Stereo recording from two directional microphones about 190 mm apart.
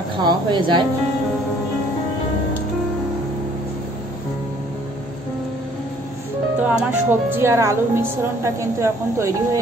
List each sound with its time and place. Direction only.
0.2 s a woman's voice: 25° right (ahead or behind)
6.6 s speech: 10° right (ahead or behind)